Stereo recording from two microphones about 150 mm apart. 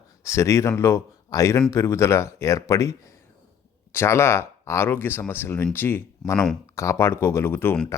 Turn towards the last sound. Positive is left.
turn(degrees=15)  # may be behind; listen again after turning